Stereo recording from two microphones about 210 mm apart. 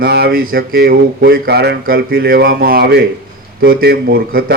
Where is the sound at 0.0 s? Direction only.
50° right (ahead or behind).